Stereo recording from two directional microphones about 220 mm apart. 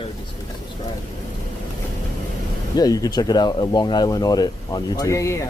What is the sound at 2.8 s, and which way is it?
Speech, 15° left (ahead or behind).